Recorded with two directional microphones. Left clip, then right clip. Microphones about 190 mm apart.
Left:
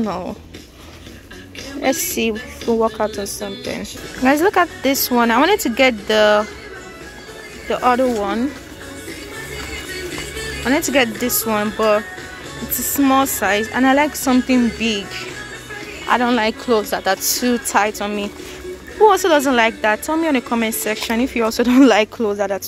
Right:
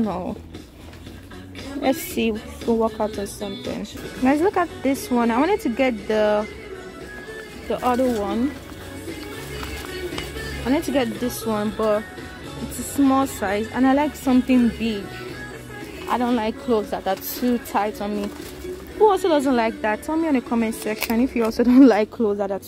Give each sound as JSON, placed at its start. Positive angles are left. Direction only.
{"t": 0.0, "sound": "a woman's voice", "side_deg": 5}
{"t": 1.8, "sound": "a woman's voice", "side_deg": 0}
{"t": 2.6, "sound": "speech", "side_deg": 10}
{"t": 7.7, "sound": "speech", "side_deg": 10}
{"t": 10.7, "sound": "speech", "side_deg": 15}
{"t": 13.0, "sound": "a woman's voice", "side_deg": 10}